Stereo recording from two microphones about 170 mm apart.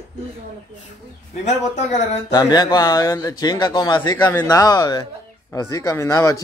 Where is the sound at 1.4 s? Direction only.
40° left (ahead or behind).